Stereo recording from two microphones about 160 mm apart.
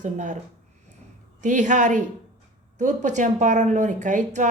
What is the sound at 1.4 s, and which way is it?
Speech, 50° right (ahead or behind).